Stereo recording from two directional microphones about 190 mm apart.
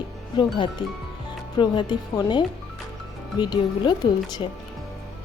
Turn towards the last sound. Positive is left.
turn(degrees=20)  # may be behind; listen again after turning